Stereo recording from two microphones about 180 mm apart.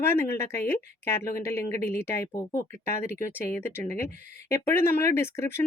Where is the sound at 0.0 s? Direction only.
10° left (ahead or behind).